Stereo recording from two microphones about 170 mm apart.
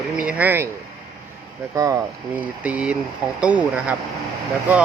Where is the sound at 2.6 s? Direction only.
5° right (ahead or behind).